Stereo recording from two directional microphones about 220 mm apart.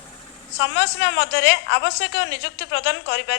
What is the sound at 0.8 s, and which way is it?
A woman's voice, 55° left (ahead or behind).